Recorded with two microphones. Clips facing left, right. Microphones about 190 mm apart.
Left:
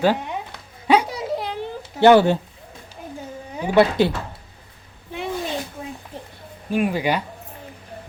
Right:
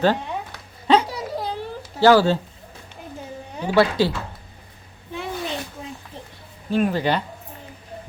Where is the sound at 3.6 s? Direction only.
20° left (ahead or behind).